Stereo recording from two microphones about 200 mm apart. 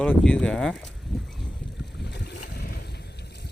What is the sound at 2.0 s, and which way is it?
Boat, 55° left (ahead or behind).